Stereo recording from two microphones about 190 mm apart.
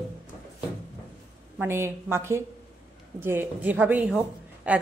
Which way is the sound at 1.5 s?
10° right (ahead or behind).